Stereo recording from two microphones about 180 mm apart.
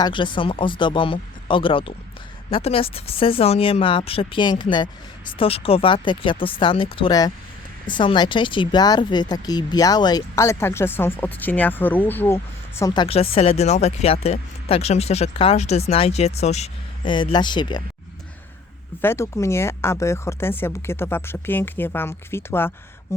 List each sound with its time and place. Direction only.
0.0 s speech: 25° left (ahead or behind); by 12.4 s 10° left (ahead or behind)
12.8 s speech: 25° left (ahead or behind)
19.0 s speech: 15° left (ahead or behind)